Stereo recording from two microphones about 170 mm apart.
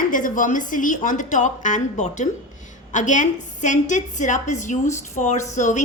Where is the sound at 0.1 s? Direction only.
50° left (ahead or behind).